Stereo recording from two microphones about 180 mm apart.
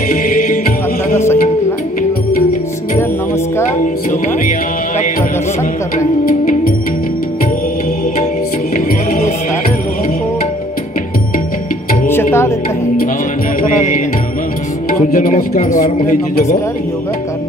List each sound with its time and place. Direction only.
0.1 s music: 50° left (ahead or behind)
1.1 s music: 15° left (ahead or behind)
3.8 s music: 45° left (ahead or behind)
8.7 s music: 50° left (ahead or behind)
12.1 s music: 15° left (ahead or behind)
13.6 s music: 45° left (ahead or behind)
14.9 s a man's voice: 50° left (ahead or behind)